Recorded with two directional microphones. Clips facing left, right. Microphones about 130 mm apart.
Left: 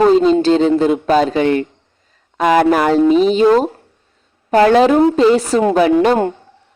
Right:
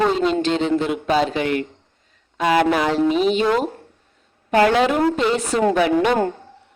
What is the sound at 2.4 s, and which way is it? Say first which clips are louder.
A woman's voice: left 5 dB; 45° left (ahead or behind).